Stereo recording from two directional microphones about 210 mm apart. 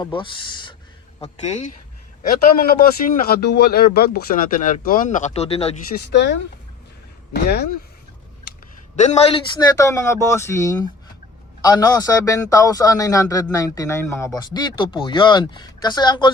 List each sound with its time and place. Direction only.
0.0 s speech: 20° left (ahead or behind)
1.2 s speech: 35° left (ahead or behind)
2.6 s speech: 45° left (ahead or behind); by 5.7 s 30° left (ahead or behind)
5.9 s speech: 55° left (ahead or behind)
9.0 s a man's voice: 30° left (ahead or behind)